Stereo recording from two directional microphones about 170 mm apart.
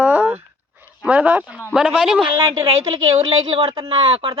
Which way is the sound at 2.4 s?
15° right (ahead or behind).